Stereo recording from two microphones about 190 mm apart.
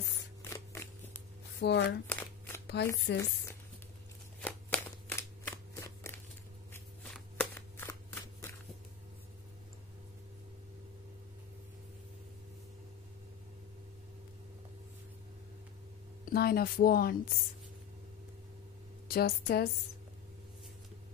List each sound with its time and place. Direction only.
0.4 s a sound: 15° left (ahead or behind)
1.6 s a woman's voice: 60° left (ahead or behind)
2.0 s shuffling cards: 10° left (ahead or behind)
2.6 s shuffling cards: 60° left (ahead or behind)
3.1 s a woman's voice: 65° left (ahead or behind)
4.4 s shuffling cards: 5° left (ahead or behind)
5.8 s a sound: 15° left (ahead or behind)
6.7 s shuffling cards: 5° left (ahead or behind)
16.3 s speech: 55° left (ahead or behind)
19.0 s a woman's voice: 55° left (ahead or behind)